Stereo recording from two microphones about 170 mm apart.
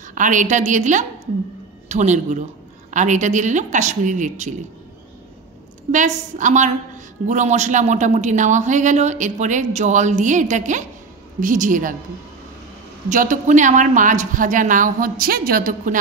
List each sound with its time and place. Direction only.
0.1 s speech: 50° right (ahead or behind)
5.9 s speech: 45° right (ahead or behind)
13.1 s speech: 50° right (ahead or behind)